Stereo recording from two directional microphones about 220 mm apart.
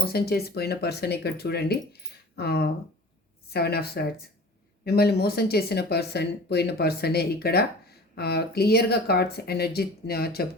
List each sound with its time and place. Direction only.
0.0 s speech: 45° left (ahead or behind)